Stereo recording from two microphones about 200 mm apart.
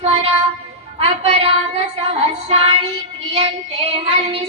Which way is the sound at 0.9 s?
30° right (ahead or behind).